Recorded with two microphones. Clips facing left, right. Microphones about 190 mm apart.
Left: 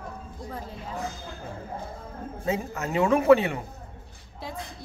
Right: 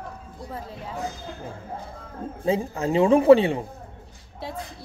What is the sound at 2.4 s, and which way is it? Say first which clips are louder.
A man's voice: right 5 dB; 30° right (ahead or behind).